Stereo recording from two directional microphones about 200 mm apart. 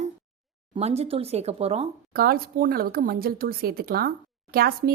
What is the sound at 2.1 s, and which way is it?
Speech, 50° right (ahead or behind).